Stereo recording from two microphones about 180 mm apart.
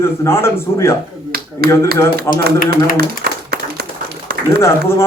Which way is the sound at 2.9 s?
60° right (ahead or behind).